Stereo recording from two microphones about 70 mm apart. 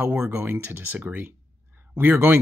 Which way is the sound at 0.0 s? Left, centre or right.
Right.